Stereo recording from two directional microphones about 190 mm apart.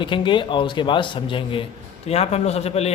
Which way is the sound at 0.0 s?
25° left (ahead or behind).